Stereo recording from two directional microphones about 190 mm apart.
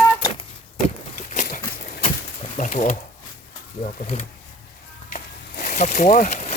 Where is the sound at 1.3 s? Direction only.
45° left (ahead or behind).